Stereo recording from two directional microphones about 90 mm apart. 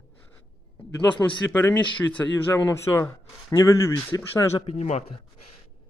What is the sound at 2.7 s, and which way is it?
Speech, 30° left (ahead or behind).